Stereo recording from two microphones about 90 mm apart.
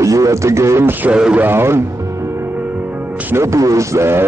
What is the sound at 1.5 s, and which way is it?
Speech, 25° right (ahead or behind).